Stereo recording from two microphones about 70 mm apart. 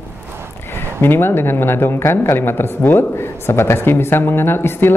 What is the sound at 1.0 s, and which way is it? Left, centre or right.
Speech, left.